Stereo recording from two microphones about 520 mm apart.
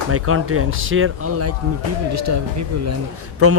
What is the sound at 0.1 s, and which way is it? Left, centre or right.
Speech, right.